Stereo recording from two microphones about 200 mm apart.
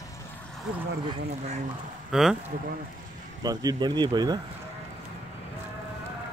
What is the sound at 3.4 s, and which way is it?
Speech, 20° right (ahead or behind).